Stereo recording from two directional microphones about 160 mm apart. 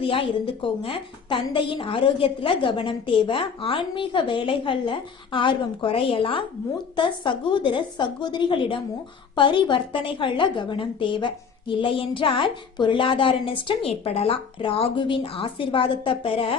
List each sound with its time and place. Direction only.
0.0 s a woman's voice: 35° left (ahead or behind)